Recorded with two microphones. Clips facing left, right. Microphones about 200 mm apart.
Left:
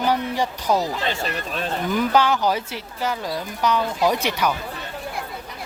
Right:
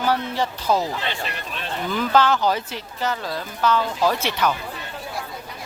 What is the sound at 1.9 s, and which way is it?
Speech, 15° left (ahead or behind).